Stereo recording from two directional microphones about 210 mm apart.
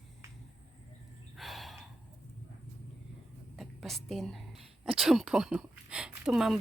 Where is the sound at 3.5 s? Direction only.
Centre (ahead or behind).